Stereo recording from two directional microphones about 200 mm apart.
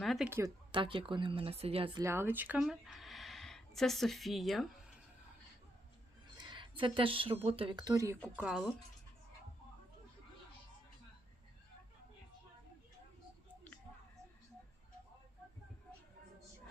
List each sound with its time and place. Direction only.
0.0 s a sound: centre (ahead or behind)
0.3 s speech: 10° right (ahead or behind)
0.7 s speech: 25° right (ahead or behind)
2.0 s speech: 15° right (ahead or behind)
6.3 s speech: 25° right (ahead or behind)
8.4 s speech: 5° right (ahead or behind)